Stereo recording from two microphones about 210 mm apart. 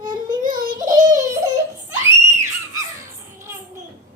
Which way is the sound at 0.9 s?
15° right (ahead or behind).